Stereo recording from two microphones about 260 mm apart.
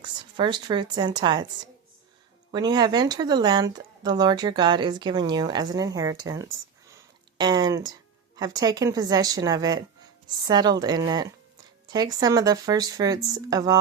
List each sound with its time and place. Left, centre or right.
0.0 s speech: centre
2.5 s speech: centre
6.9 s a sound: centre
8.4 s speech: centre